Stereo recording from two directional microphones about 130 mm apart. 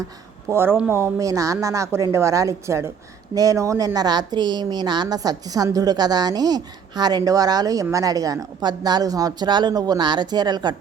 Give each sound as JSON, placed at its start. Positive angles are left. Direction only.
{"t": 0.5, "sound": "a woman's voice", "side_deg": -15}